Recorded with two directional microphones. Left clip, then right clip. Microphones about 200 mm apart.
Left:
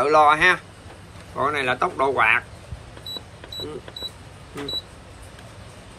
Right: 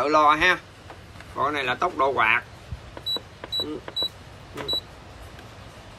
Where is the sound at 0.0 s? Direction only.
15° right (ahead or behind).